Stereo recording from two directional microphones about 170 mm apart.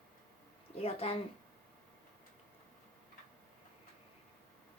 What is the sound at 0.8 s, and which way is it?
Speech, 35° left (ahead or behind).